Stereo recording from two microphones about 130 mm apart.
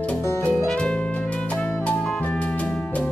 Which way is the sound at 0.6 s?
5° left (ahead or behind).